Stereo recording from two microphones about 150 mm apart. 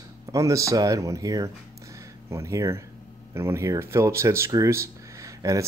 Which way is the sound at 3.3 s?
15° right (ahead or behind).